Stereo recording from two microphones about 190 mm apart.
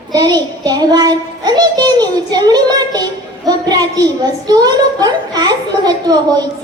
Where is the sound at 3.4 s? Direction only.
20° right (ahead or behind).